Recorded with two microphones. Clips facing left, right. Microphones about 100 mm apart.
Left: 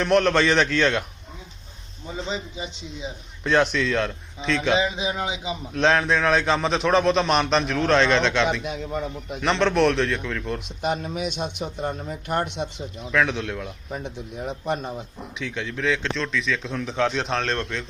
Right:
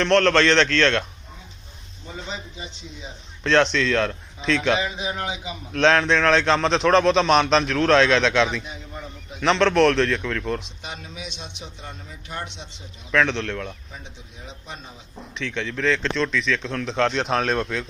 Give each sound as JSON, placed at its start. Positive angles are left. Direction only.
{"t": 0.0, "sound": "a man's voice", "side_deg": 10}
{"t": 2.2, "sound": "speech", "side_deg": 20}
{"t": 3.4, "sound": "a man's voice", "side_deg": 5}
{"t": 4.8, "sound": "speech", "side_deg": 15}
{"t": 5.7, "sound": "a man's voice", "side_deg": 0}
{"t": 8.6, "sound": "a man's voice", "side_deg": 75}
{"t": 9.4, "sound": "a man's voice", "side_deg": 0}
{"t": 10.6, "sound": "speech", "side_deg": 50}
{"t": 13.1, "sound": "a man's voice", "side_deg": 5}
{"t": 13.9, "sound": "speech", "side_deg": 55}
{"t": 15.4, "sound": "a man's voice", "side_deg": 5}